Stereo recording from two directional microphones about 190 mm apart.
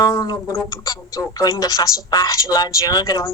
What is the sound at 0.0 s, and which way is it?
A woman's voice, 20° left (ahead or behind).